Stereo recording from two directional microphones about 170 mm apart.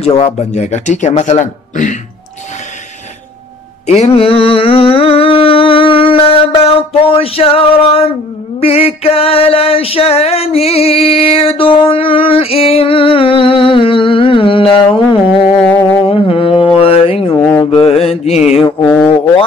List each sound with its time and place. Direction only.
0.2 s speech: 40° left (ahead or behind)
3.8 s music: 40° left (ahead or behind)
8.5 s a sound: 35° left (ahead or behind)
15.7 s a sound: 10° left (ahead or behind)
16.1 s mantra: 30° left (ahead or behind)
17.3 s mantra: 20° left (ahead or behind)
17.6 s mantra: 35° left (ahead or behind)